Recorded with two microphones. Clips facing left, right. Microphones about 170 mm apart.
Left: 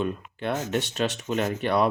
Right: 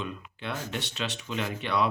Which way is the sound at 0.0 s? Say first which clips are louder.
Left 8 dB; 50° left (ahead or behind).